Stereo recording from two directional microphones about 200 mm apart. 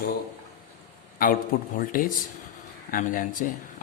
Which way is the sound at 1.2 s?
45° left (ahead or behind).